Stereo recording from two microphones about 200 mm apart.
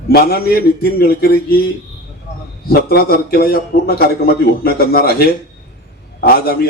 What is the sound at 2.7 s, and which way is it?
A man's voice, 50° left (ahead or behind).